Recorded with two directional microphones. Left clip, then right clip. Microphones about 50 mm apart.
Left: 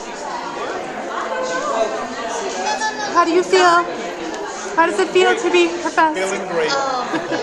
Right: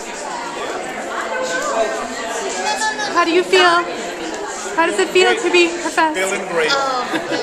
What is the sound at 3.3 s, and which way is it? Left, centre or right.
Speech, left.